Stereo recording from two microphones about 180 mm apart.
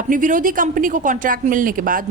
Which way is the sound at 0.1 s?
45° right (ahead or behind).